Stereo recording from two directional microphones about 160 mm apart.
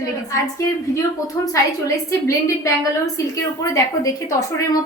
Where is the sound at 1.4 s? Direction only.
20° left (ahead or behind).